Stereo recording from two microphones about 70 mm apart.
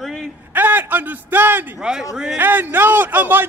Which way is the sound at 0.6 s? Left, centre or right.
Right.